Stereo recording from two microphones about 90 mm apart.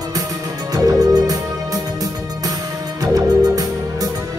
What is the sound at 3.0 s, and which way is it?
Music, 45° right (ahead or behind).